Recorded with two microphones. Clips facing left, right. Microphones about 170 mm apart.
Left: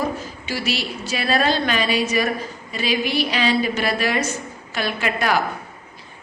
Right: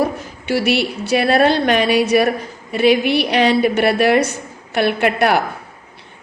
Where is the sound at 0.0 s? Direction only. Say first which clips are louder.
Right 5 dB; 65° right (ahead or behind).